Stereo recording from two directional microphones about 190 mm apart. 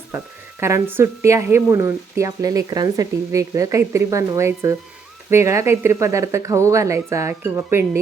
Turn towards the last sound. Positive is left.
turn(degrees=-15)  # may be behind; listen again after turning